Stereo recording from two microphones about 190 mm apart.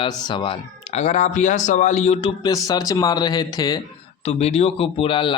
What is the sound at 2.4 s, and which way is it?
Speech, 20° left (ahead or behind).